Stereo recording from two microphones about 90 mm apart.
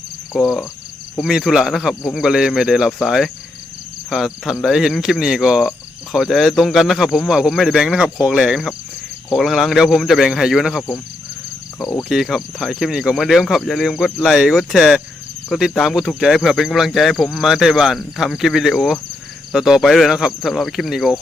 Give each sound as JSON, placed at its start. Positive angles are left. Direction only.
{"t": 0.3, "sound": "cricket", "side_deg": -5}
{"t": 11.8, "sound": "cricket", "side_deg": 35}
{"t": 12.0, "sound": "cricket", "side_deg": -5}